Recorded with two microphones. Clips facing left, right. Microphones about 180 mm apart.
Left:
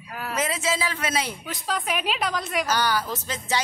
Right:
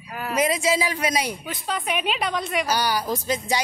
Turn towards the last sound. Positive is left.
turn(degrees=-10)  # may be behind; listen again after turning